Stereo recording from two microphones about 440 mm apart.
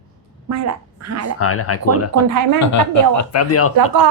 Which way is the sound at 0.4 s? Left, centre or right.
Right.